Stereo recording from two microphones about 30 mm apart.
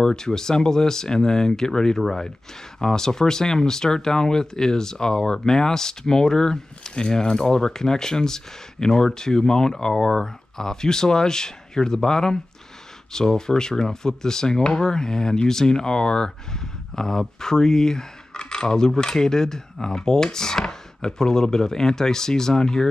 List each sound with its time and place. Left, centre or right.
0.0 s speech: centre